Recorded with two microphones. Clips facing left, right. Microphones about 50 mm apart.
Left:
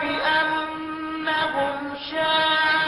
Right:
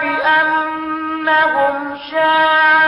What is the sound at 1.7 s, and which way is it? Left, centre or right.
Female singing, right.